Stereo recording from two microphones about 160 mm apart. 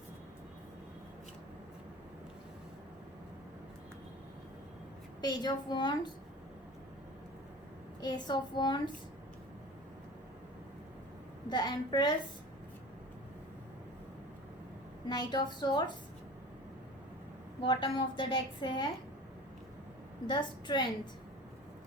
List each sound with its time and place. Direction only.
5.2 s a woman's voice: 25° left (ahead or behind)
8.0 s a woman's voice: 30° left (ahead or behind)
11.4 s a woman's voice: 25° left (ahead or behind)
15.1 s a woman's voice: 25° left (ahead or behind)
17.6 s a woman's voice: 30° left (ahead or behind)
20.2 s a woman's voice: 30° left (ahead or behind)